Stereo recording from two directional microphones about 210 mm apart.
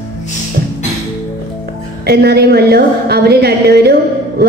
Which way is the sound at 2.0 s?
50° right (ahead or behind).